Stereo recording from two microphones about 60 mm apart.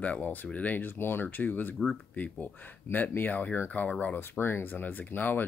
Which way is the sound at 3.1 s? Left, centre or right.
Left.